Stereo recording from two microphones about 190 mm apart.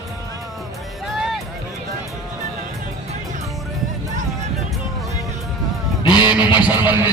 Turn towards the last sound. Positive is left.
turn(degrees=-10)  # may be behind; listen again after turning